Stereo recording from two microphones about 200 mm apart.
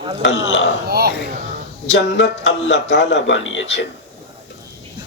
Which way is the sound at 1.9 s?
65° left (ahead or behind).